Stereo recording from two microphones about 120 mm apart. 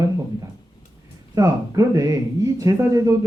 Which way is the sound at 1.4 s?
25° right (ahead or behind).